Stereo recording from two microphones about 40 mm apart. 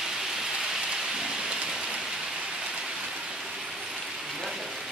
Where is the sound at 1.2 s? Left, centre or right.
Centre.